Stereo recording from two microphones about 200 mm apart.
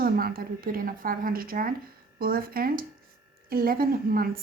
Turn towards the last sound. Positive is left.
turn(degrees=-45)  # may be behind; listen again after turning